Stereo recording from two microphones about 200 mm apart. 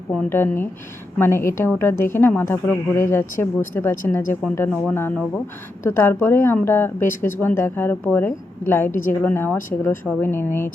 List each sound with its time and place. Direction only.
0.2 s a woman's voice: 10° left (ahead or behind)